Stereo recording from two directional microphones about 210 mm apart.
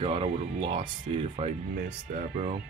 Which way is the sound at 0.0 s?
30° right (ahead or behind).